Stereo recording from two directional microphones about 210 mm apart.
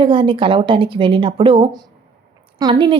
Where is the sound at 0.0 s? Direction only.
25° right (ahead or behind).